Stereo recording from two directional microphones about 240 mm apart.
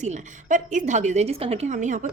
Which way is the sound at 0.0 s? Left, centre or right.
Right.